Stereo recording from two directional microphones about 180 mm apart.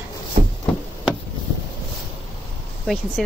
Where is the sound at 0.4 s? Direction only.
40° right (ahead or behind).